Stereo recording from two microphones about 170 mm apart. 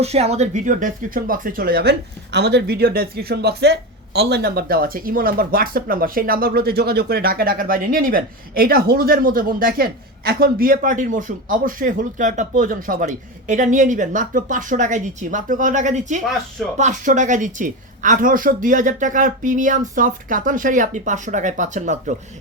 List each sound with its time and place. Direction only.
0.0 s speech: 40° right (ahead or behind)